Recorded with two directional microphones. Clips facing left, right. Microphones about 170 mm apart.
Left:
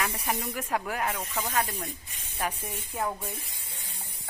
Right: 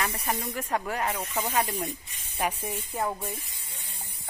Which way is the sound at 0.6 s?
Centre (ahead or behind).